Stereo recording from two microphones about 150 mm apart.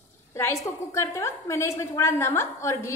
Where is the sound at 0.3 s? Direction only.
20° left (ahead or behind).